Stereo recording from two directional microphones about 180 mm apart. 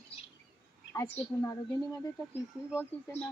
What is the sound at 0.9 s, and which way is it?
Speech, 20° left (ahead or behind).